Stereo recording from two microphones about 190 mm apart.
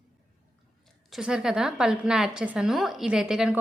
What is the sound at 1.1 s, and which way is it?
A woman's voice, 5° right (ahead or behind).